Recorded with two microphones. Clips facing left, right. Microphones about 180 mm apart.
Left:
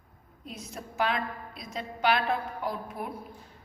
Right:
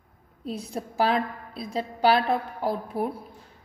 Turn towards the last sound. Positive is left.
turn(degrees=-30)  # may be behind; listen again after turning